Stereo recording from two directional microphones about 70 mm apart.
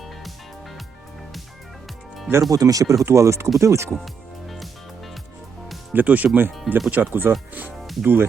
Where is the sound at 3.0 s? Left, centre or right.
Right.